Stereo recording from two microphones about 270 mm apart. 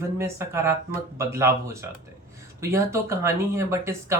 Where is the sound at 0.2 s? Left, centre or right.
Centre.